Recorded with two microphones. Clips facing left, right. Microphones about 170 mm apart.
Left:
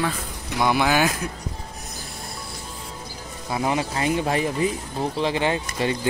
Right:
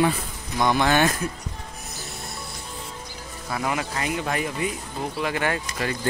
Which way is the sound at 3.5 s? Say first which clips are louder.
Left 3 dB; 25° left (ahead or behind).